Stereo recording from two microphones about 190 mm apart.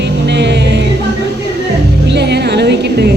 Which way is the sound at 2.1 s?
60° right (ahead or behind).